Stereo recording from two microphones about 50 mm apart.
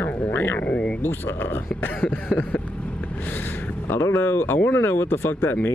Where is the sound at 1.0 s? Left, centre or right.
Left.